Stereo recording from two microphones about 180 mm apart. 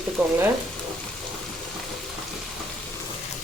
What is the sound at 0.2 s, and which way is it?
Stir, 5° right (ahead or behind).